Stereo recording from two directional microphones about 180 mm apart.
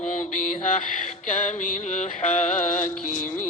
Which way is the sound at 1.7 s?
40° left (ahead or behind).